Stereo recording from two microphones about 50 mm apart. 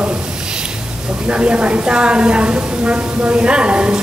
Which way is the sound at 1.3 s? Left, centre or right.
Right.